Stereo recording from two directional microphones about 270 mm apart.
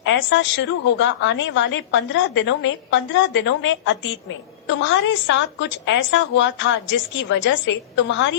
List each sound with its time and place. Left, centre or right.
0.0 s a woman's voice: left